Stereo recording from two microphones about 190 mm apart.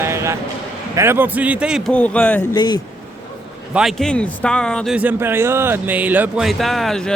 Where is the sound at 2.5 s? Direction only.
20° left (ahead or behind).